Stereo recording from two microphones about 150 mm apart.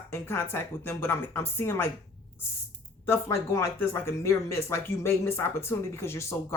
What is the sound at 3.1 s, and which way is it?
Speech, 20° left (ahead or behind).